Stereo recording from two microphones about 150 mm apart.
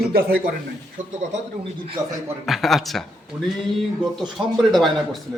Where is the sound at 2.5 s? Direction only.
Centre (ahead or behind).